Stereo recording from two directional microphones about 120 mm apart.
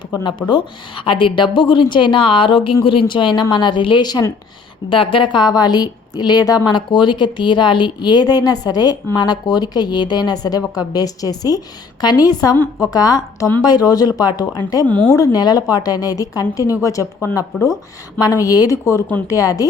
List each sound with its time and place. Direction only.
0.1 s a woman's voice: 35° left (ahead or behind)
4.9 s a woman's voice: 45° left (ahead or behind); by 19.6 s 30° left (ahead or behind)